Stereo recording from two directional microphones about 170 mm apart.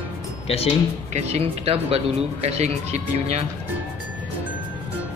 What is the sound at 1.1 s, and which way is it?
Speech, 40° right (ahead or behind).